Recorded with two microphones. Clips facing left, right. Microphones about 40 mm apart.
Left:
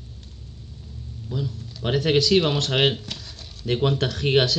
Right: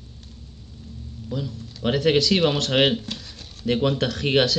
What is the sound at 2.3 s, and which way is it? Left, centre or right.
Speech, centre.